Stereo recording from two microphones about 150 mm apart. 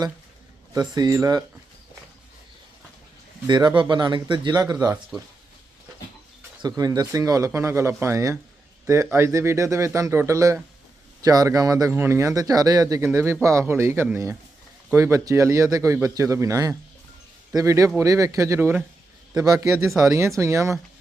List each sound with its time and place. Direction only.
0.7 s speech: 25° right (ahead or behind)
3.4 s speech: 30° right (ahead or behind)
6.6 s speech: 25° right (ahead or behind)